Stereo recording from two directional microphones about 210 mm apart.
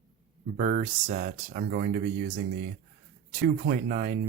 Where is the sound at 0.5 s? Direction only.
40° right (ahead or behind).